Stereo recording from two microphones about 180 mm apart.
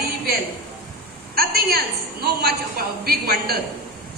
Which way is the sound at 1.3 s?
60° right (ahead or behind).